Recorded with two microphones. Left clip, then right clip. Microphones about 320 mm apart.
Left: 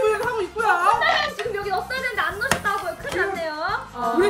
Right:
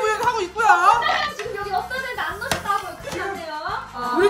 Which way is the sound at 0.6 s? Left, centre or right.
Right.